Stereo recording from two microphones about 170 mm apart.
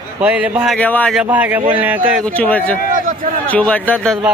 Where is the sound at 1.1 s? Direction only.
10° right (ahead or behind).